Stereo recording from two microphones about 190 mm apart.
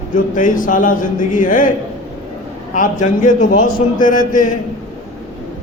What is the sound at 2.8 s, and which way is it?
A man's voice, 45° left (ahead or behind).